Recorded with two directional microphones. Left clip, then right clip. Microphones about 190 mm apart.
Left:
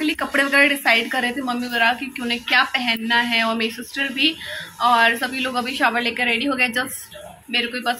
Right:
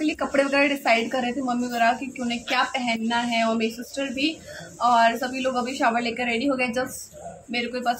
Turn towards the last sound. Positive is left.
turn(degrees=-10)  # may be behind; listen again after turning